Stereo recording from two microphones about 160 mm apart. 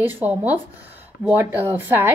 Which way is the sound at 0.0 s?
10° right (ahead or behind).